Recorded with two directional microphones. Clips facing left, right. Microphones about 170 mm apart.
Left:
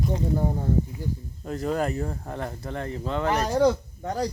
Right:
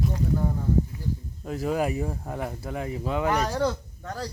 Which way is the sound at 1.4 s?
5° right (ahead or behind).